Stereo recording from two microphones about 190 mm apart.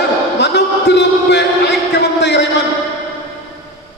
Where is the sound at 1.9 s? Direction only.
65° left (ahead or behind).